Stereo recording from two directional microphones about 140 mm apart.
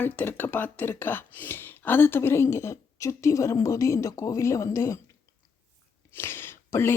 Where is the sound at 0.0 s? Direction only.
10° left (ahead or behind).